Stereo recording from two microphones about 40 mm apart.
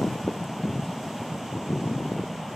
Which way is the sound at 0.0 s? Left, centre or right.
Centre.